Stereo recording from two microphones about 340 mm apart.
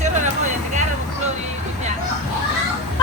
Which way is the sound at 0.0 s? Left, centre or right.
Right.